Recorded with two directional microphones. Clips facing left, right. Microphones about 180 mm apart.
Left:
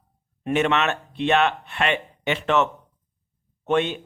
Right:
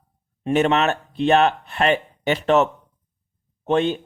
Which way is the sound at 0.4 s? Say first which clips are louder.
Right 3 dB; 35° right (ahead or behind).